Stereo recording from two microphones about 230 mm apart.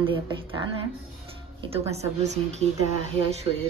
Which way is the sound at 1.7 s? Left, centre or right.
Right.